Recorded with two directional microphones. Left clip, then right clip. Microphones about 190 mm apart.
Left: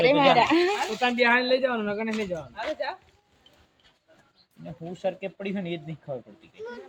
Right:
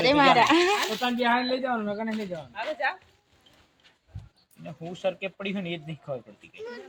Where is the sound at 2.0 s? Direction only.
45° left (ahead or behind).